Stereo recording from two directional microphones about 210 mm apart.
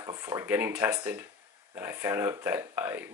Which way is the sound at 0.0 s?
15° right (ahead or behind).